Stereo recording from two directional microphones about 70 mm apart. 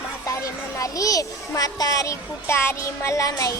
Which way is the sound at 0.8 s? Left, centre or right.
Left.